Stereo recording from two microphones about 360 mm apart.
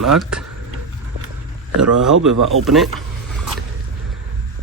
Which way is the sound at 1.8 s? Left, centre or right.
Right.